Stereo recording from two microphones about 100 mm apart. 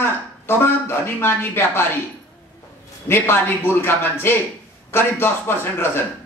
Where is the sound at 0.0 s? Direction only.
25° left (ahead or behind).